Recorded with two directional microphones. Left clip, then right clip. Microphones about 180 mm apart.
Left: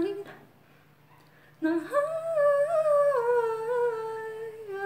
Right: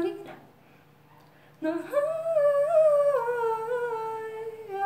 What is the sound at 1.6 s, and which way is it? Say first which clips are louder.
Humming: even; 15° left (ahead or behind).